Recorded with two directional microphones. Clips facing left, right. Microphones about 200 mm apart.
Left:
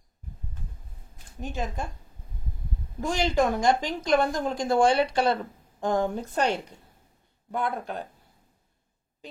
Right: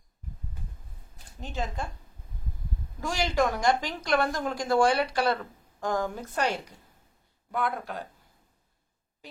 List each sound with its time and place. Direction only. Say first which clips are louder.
1.4 s speech: left 2 dB; 15° left (ahead or behind)
3.0 s a woman's voice: left 2 dB; 20° left (ahead or behind)